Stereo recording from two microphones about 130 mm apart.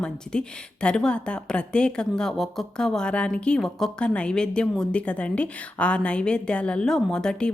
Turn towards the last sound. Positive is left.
turn(degrees=5)  # may be behind; listen again after turning